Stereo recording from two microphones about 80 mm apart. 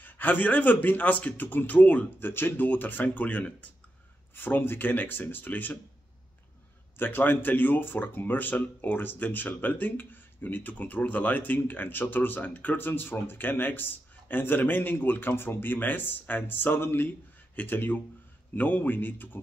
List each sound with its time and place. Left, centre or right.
0.0 s speech: left
7.0 s speech: left